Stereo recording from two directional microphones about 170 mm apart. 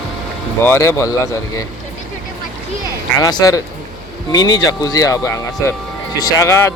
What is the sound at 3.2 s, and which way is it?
Speech, 20° left (ahead or behind).